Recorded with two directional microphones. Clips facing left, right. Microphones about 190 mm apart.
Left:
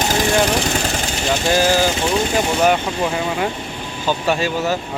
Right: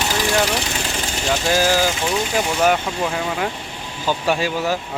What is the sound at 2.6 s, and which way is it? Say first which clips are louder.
Speech: even; 5° left (ahead or behind).